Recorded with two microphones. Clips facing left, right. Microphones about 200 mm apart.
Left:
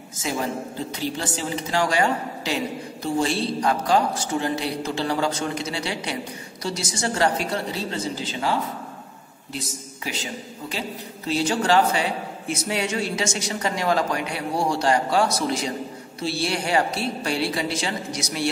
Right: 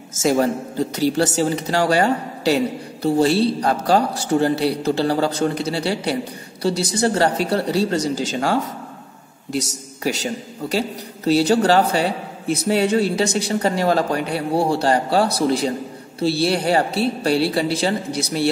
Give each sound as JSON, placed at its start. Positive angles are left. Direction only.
{"t": 0.2, "sound": "speech", "side_deg": -40}
{"t": 6.7, "sound": "a woman's voice", "side_deg": -60}
{"t": 7.0, "sound": "a man's voice", "side_deg": -35}
{"t": 10.0, "sound": "a man's voice", "side_deg": -40}